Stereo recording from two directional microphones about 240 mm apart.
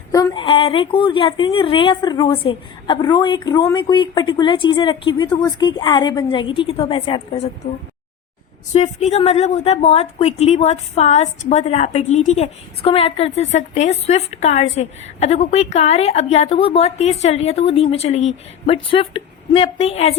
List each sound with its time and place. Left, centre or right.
0.1 s a woman's voice: centre
8.7 s a woman's voice: left